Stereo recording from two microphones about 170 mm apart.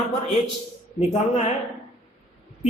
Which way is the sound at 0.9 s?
40° left (ahead or behind).